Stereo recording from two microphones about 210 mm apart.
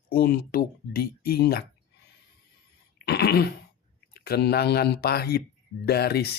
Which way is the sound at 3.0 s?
50° left (ahead or behind).